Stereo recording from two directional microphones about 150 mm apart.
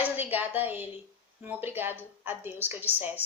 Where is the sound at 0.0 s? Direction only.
10° right (ahead or behind).